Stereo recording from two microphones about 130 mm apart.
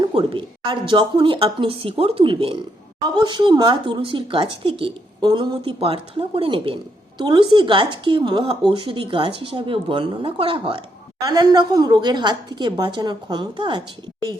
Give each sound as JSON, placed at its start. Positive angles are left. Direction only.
{"t": 0.1, "sound": "a woman's voice", "side_deg": -45}